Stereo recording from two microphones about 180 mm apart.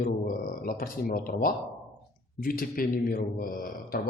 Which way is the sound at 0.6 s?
55° left (ahead or behind).